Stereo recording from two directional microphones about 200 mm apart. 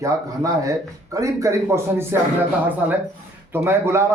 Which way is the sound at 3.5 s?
10° right (ahead or behind).